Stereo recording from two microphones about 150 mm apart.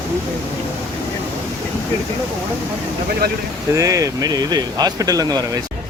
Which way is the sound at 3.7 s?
20° right (ahead or behind).